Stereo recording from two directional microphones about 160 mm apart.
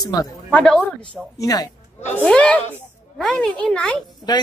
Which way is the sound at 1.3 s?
25° left (ahead or behind).